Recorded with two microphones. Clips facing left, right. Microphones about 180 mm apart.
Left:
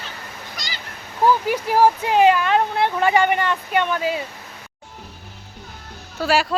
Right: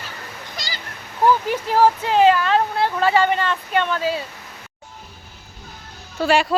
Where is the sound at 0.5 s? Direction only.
35° right (ahead or behind).